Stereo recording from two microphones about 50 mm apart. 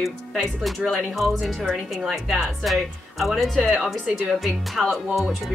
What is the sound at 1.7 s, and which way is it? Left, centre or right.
Speech, centre.